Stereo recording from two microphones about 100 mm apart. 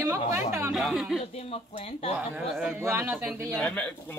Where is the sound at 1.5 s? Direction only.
85° left.